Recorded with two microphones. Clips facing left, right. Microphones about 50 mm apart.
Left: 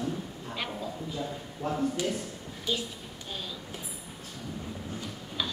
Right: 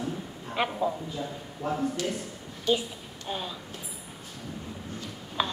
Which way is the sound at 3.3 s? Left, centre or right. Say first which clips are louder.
Right 6 dB; right.